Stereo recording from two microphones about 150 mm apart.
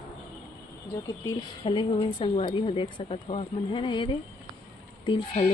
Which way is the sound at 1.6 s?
35° left (ahead or behind).